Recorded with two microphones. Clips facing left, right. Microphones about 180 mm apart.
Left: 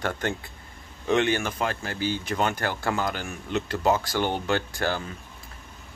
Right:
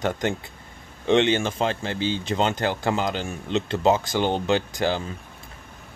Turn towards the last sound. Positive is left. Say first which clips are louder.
# right 3 dB
turn(degrees=-20)  # may be behind; listen again after turning